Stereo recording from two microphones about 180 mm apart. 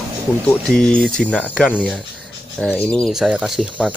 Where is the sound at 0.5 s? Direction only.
5° left (ahead or behind).